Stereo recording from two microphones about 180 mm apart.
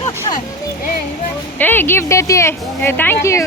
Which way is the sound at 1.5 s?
10° left (ahead or behind).